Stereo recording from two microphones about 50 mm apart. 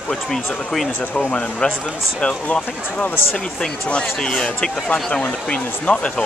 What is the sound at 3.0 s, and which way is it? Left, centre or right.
Speech, left.